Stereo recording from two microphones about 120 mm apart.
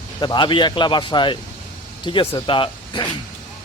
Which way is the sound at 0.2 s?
40° left (ahead or behind).